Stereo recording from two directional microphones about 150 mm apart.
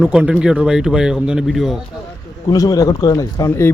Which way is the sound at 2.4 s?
25° left (ahead or behind).